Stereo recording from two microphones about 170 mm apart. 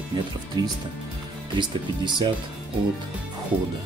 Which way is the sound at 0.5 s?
25° right (ahead or behind).